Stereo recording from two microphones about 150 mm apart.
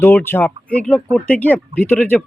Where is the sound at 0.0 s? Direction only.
15° left (ahead or behind).